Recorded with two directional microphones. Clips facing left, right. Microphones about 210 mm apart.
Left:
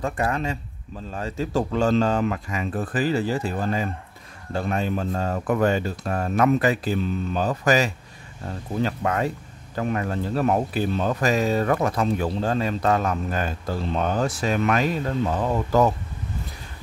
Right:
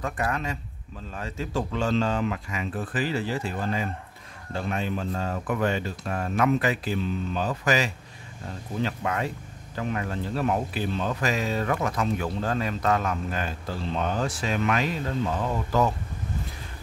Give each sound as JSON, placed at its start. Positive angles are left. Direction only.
{"t": 0.0, "sound": "speech", "side_deg": 30}